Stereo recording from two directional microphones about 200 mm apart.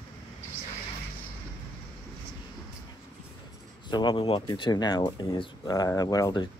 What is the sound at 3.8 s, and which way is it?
Speech, 25° left (ahead or behind).